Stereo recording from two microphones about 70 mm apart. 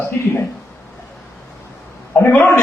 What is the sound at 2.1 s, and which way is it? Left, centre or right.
Speech, left.